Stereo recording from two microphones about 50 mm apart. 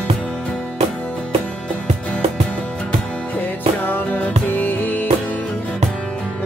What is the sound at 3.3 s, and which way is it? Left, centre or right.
Music, left.